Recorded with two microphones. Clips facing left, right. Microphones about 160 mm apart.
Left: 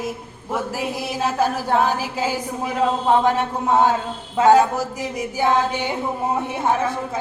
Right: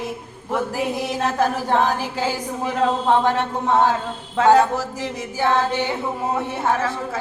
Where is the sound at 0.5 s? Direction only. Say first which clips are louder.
Right 2 dB; 5° left (ahead or behind).